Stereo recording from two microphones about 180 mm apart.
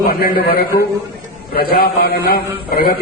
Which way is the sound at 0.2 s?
55° left (ahead or behind).